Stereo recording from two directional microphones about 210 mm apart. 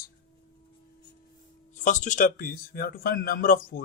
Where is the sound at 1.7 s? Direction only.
35° left (ahead or behind).